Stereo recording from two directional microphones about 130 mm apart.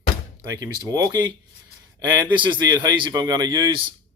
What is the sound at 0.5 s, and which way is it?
Speech, 30° right (ahead or behind).